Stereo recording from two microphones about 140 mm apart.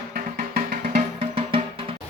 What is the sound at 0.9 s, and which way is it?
Music, 40° right (ahead or behind).